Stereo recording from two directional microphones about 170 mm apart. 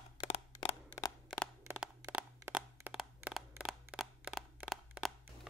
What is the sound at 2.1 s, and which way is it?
Crushing, 10° right (ahead or behind).